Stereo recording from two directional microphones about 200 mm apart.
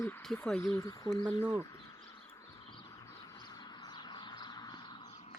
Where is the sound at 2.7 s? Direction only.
20° left (ahead or behind).